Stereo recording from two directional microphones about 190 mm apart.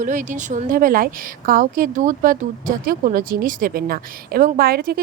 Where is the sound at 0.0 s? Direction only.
40° right (ahead or behind).